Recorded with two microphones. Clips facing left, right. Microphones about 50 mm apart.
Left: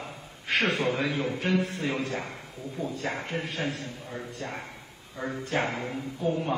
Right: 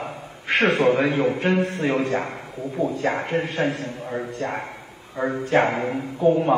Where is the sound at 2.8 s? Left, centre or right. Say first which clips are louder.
Right 9 dB; centre.